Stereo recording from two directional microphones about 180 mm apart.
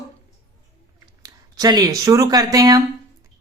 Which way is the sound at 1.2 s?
20° right (ahead or behind).